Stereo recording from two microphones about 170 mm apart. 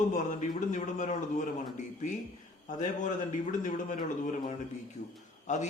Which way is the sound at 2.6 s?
50° left (ahead or behind).